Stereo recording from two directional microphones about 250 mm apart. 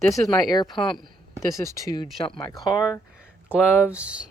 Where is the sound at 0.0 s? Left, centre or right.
Centre.